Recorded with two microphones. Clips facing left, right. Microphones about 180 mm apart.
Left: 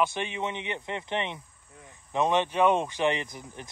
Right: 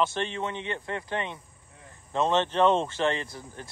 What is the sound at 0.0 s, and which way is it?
Speech, 15° left (ahead or behind).